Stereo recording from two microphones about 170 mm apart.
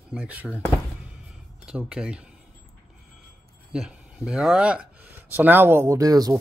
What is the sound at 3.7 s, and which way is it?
Speech, 5° right (ahead or behind).